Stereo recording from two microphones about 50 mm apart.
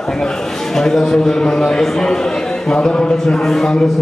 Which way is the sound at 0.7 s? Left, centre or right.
Centre.